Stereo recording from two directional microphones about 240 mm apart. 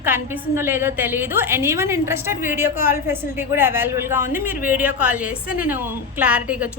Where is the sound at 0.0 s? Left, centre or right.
Centre.